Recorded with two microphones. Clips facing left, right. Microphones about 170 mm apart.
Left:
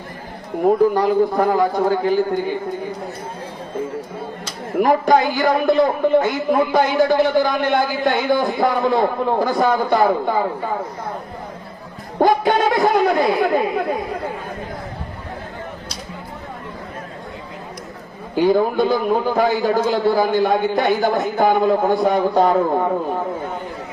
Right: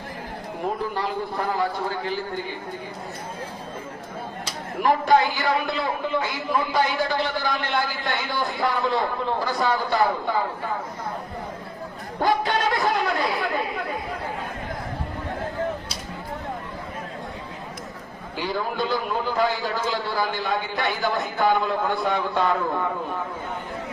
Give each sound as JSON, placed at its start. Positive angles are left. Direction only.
{"t": 0.9, "sound": "a man's voice", "side_deg": 45}
{"t": 4.8, "sound": "a man's voice", "side_deg": 45}
{"t": 12.2, "sound": "speech", "side_deg": 45}
{"t": 18.3, "sound": "a man's voice", "side_deg": 45}